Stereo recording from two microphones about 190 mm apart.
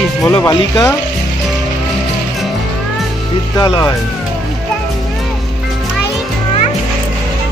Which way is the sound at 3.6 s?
20° left (ahead or behind).